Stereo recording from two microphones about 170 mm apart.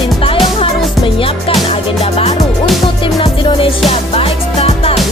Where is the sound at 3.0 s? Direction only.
30° left (ahead or behind).